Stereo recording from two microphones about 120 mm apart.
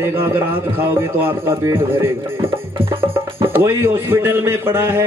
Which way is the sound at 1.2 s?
20° right (ahead or behind).